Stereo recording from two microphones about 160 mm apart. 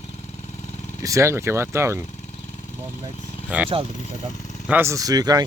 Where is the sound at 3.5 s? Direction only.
10° right (ahead or behind).